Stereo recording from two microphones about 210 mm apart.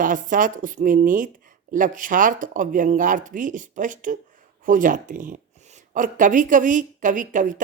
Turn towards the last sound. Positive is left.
turn(degrees=-40)  # may be behind; listen again after turning